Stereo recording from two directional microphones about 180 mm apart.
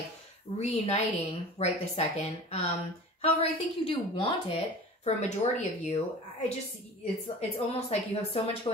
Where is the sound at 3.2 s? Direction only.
35° left (ahead or behind).